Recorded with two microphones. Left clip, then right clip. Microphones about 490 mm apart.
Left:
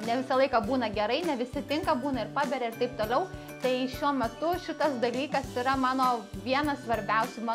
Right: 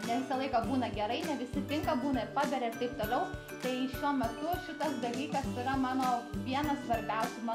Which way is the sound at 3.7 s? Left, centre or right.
Left.